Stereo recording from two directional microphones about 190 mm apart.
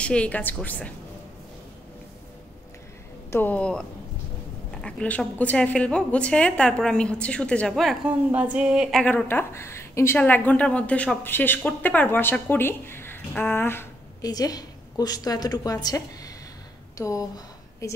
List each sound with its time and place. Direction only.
0.0 s a woman's voice: 5° left (ahead or behind)
3.3 s a woman's voice: 10° left (ahead or behind)
9.0 s a woman's voice: 10° left (ahead or behind)